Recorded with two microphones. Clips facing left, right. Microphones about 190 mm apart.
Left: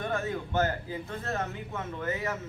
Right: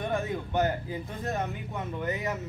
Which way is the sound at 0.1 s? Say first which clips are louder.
Right 1 dB; 15° right (ahead or behind).